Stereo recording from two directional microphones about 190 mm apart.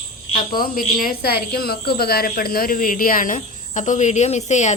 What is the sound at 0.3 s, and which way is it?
A woman's voice, 50° left (ahead or behind).